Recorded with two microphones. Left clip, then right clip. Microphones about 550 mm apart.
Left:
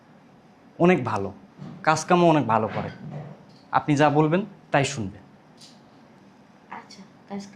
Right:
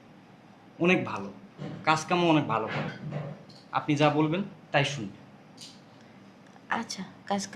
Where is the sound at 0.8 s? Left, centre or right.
Left.